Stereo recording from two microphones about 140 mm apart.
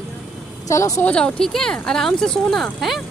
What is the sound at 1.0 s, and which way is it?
Speech, 5° left (ahead or behind).